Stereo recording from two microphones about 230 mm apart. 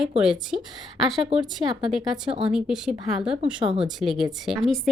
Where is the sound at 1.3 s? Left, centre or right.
Centre.